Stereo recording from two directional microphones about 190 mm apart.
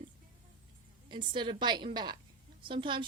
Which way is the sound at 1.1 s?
25° right (ahead or behind).